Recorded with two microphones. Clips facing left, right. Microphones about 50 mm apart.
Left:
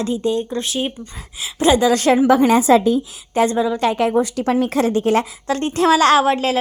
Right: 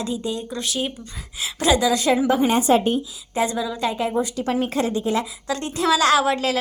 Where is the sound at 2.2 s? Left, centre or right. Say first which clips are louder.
Left 6 dB; left.